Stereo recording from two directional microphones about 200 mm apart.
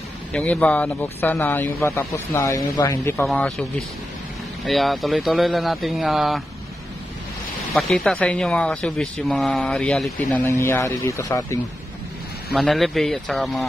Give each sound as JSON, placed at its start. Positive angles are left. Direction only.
{"t": 0.3, "sound": "speech", "side_deg": 5}
{"t": 3.3, "sound": "speech", "side_deg": 5}
{"t": 7.7, "sound": "speech", "side_deg": 5}
{"t": 12.5, "sound": "speech", "side_deg": 0}